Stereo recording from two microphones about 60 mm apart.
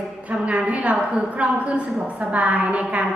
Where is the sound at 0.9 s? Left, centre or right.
Centre.